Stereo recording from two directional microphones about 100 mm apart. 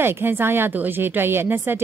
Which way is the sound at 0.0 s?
20° right (ahead or behind).